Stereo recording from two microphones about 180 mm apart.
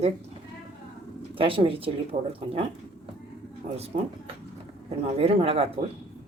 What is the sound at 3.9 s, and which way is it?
Speech, 40° right (ahead or behind).